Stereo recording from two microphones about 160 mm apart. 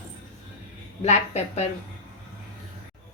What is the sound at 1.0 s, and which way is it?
Speech, 45° left (ahead or behind).